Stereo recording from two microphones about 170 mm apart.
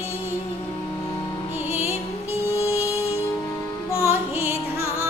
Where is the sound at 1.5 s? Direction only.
15° right (ahead or behind).